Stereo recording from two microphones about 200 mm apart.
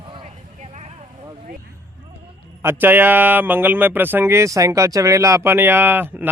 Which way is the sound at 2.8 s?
10° right (ahead or behind).